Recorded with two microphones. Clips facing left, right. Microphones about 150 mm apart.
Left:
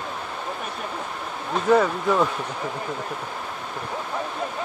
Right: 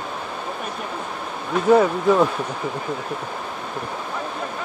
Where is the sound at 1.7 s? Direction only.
10° right (ahead or behind).